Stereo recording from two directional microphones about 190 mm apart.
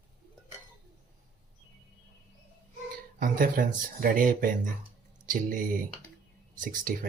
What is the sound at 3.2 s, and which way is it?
Speech, 45° right (ahead or behind).